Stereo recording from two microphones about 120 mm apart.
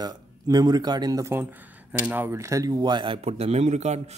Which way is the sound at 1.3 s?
15° right (ahead or behind).